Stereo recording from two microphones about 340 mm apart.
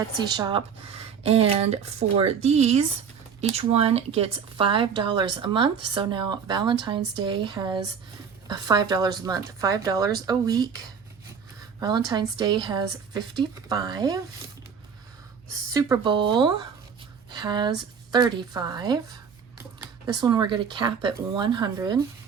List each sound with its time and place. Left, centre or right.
0.2 s speech: centre
11.8 s speech: centre
15.7 s speech: centre